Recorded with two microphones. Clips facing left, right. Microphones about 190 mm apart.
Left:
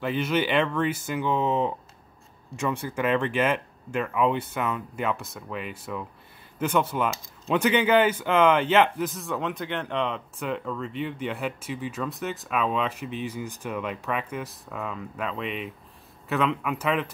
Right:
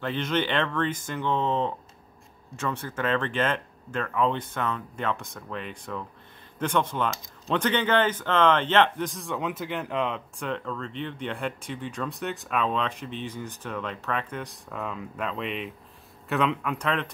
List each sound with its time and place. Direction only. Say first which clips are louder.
0.0 s speech: left 2 dB; 5° left (ahead or behind)